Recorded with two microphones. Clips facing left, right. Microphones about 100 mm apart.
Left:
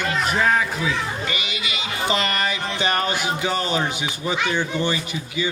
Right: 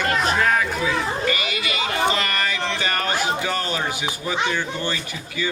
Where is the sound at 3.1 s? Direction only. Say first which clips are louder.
Even; 20° left (ahead or behind).